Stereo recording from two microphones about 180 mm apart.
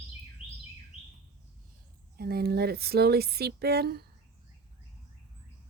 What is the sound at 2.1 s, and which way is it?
Speech, 55° right (ahead or behind).